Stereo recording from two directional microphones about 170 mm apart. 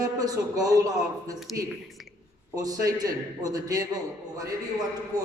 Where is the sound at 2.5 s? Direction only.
20° right (ahead or behind).